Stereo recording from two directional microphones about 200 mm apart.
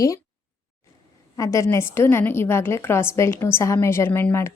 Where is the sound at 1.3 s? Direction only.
15° left (ahead or behind).